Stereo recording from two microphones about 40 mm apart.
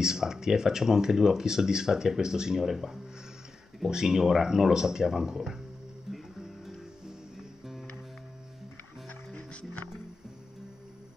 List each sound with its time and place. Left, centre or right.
0.0 s speech: centre
6.1 s music: centre
9.3 s music: left